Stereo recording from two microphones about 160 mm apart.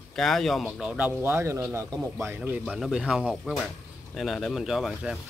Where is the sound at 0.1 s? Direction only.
Centre (ahead or behind); by 2.6 s 15° right (ahead or behind).